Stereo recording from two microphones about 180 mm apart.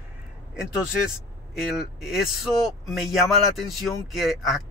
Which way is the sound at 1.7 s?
Centre (ahead or behind).